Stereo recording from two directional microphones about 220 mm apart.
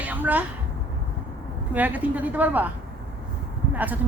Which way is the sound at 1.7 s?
5° right (ahead or behind).